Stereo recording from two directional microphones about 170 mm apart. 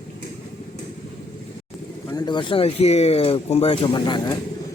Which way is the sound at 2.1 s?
25° left (ahead or behind).